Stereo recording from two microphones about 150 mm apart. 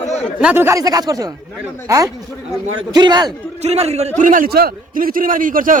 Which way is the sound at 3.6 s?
45° right (ahead or behind).